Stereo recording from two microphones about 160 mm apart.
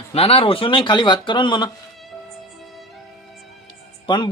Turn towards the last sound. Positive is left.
turn(degrees=30)  # may be behind; listen again after turning